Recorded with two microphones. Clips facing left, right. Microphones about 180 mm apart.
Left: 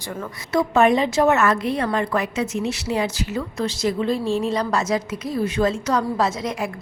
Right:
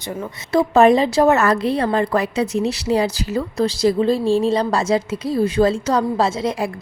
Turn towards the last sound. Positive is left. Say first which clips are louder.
# right 3 dB
turn(degrees=-30)  # may be behind; listen again after turning